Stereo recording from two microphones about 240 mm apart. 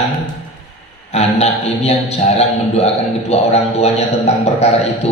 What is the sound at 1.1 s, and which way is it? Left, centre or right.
A man's voice, left.